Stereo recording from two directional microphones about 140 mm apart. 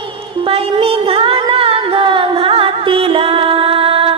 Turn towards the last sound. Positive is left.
turn(degrees=-40)  # may be behind; listen again after turning